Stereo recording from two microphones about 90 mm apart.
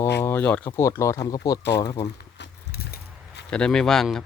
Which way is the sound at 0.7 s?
30° left (ahead or behind).